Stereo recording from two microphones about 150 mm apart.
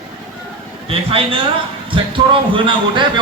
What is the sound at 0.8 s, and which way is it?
A man's voice, 40° right (ahead or behind).